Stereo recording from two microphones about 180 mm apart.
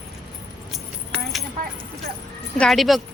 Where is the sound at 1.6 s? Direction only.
50° right (ahead or behind).